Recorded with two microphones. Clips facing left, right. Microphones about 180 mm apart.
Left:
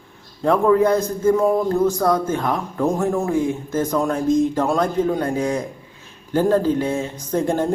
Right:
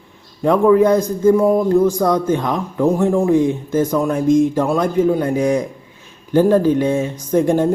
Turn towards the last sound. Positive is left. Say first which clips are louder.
# right 5 dB
turn(degrees=-15)  # may be behind; listen again after turning